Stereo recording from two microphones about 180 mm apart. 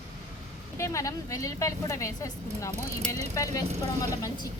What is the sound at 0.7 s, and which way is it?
A woman's voice, 15° left (ahead or behind).